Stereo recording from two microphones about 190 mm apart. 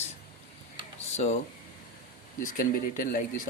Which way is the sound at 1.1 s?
35° left (ahead or behind).